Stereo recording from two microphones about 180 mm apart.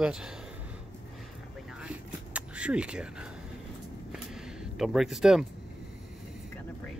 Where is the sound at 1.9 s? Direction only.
5° right (ahead or behind).